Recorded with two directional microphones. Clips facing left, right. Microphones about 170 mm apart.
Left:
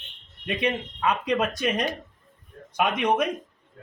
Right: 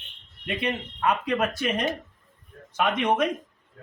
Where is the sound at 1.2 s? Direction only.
15° left (ahead or behind).